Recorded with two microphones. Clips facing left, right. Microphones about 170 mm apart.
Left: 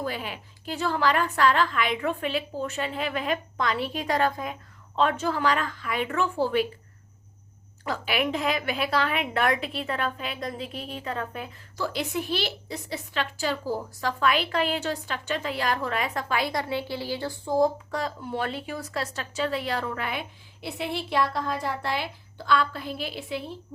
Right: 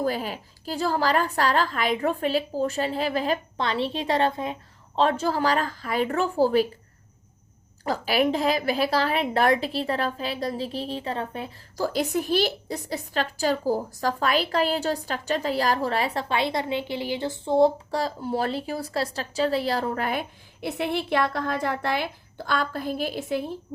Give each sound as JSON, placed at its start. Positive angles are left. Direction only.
{"t": 0.0, "sound": "a woman's voice", "side_deg": -40}
{"t": 7.9, "sound": "a woman's voice", "side_deg": -35}